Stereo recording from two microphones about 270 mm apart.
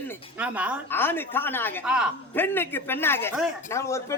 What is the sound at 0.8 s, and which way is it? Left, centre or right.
A man's voice, centre.